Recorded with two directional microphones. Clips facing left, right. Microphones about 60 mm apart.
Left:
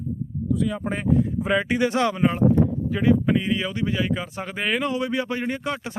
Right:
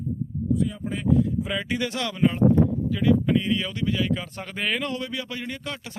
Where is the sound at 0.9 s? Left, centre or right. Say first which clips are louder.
Right 1 dB; left; by 5.1 s centre.